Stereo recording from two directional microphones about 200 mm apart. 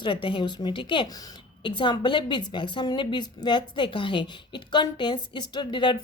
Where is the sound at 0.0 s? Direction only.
25° left (ahead or behind).